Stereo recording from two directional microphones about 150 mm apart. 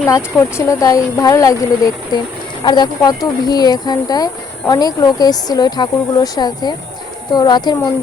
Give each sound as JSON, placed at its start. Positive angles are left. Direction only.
{"t": 0.1, "sound": "speech", "side_deg": 15}